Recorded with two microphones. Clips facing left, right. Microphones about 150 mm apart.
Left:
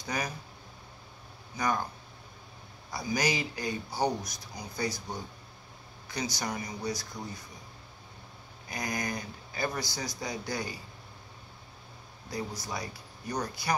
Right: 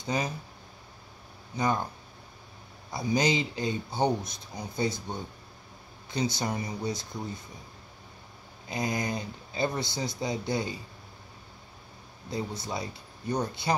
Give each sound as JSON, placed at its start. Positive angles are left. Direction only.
{"t": 0.0, "sound": "speech", "side_deg": -25}
{"t": 1.6, "sound": "speech", "side_deg": -25}
{"t": 2.9, "sound": "speech", "side_deg": -25}
{"t": 6.3, "sound": "speech", "side_deg": -25}
{"t": 8.6, "sound": "speech", "side_deg": -25}
{"t": 12.3, "sound": "speech", "side_deg": -25}